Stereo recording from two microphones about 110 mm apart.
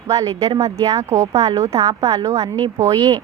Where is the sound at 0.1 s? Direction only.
35° right (ahead or behind).